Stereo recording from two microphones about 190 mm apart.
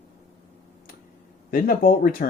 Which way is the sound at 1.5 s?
50° left (ahead or behind).